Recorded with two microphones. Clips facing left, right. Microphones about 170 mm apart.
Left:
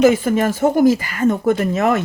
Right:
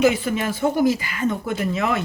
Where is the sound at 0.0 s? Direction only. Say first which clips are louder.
Left 6 dB; 45° left (ahead or behind).